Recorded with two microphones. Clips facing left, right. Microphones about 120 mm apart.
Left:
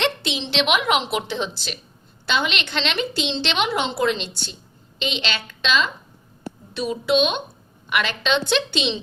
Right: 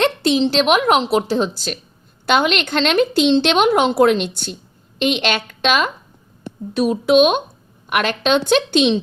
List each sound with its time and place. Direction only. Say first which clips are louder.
0.0 s a woman's voice: right 9 dB; 45° right (ahead or behind)